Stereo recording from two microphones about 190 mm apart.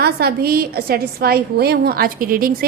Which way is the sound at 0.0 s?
55° right (ahead or behind).